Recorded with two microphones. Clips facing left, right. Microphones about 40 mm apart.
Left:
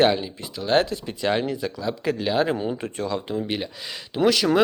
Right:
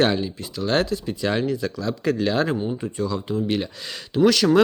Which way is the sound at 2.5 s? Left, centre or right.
Left.